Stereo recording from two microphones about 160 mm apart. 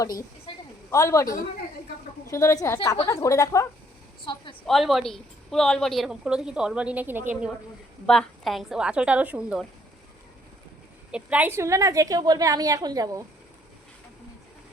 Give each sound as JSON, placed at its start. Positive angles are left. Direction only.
{"t": 0.9, "sound": "a woman's voice", "side_deg": 20}
{"t": 4.2, "sound": "a woman's voice", "side_deg": 30}
{"t": 4.6, "sound": "a woman's voice", "side_deg": 0}
{"t": 8.0, "sound": "a woman's voice", "side_deg": 5}
{"t": 11.1, "sound": "a woman's voice", "side_deg": -10}